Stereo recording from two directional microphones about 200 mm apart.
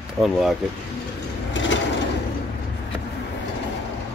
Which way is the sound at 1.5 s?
65° left (ahead or behind).